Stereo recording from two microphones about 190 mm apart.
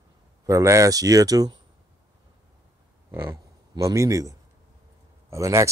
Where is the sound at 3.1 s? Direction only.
10° right (ahead or behind).